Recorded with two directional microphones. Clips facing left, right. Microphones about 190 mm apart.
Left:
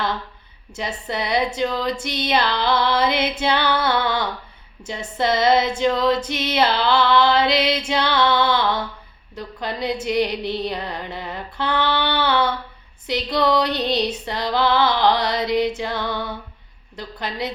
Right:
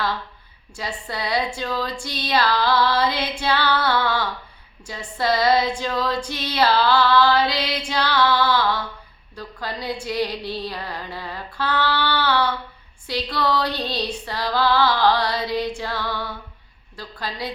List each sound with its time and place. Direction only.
0.8 s female singing: 20° left (ahead or behind)